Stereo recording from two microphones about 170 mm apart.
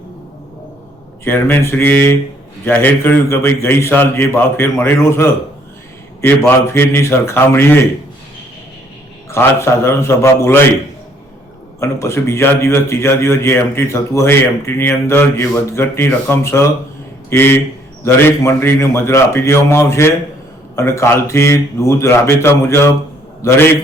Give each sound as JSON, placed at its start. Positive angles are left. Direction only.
{"t": 1.2, "sound": "a man's voice", "side_deg": 15}
{"t": 6.5, "sound": "a man's voice", "side_deg": 15}
{"t": 9.3, "sound": "a man's voice", "side_deg": 15}
{"t": 11.8, "sound": "a man's voice", "side_deg": 15}